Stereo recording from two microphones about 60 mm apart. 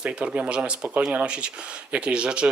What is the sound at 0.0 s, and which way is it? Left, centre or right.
Speech, centre.